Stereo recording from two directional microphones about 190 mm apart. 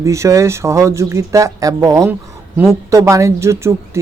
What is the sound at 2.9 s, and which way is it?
Speech, 15° right (ahead or behind).